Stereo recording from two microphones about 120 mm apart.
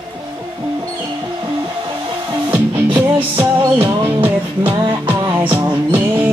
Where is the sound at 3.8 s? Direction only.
45° right (ahead or behind).